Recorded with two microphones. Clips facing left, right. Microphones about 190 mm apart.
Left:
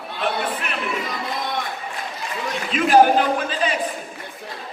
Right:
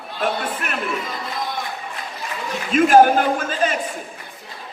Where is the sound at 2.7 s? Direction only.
45° right (ahead or behind).